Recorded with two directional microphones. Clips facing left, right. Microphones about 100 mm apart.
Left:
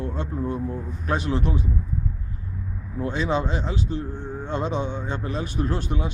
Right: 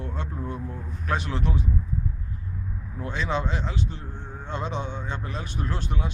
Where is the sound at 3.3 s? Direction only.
5° left (ahead or behind).